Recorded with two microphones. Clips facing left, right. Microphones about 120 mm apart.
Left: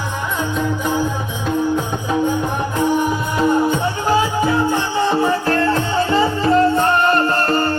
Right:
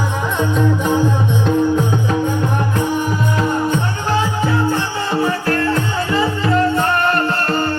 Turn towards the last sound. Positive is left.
turn(degrees=30)  # may be behind; listen again after turning